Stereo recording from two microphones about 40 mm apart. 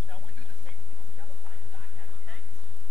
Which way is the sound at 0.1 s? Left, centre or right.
Left.